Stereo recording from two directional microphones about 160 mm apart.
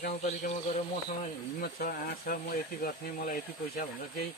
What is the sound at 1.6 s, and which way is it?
Speech, 60° left (ahead or behind).